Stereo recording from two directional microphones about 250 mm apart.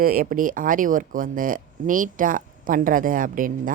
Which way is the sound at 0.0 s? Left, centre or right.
Right.